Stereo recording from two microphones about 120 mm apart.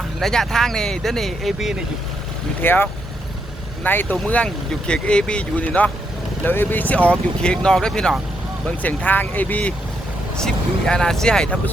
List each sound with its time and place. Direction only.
0.2 s speech: 5° left (ahead or behind)
2.6 s speech: 15° left (ahead or behind)